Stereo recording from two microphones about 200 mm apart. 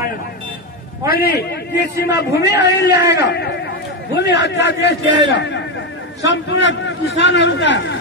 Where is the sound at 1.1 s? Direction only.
50° left (ahead or behind).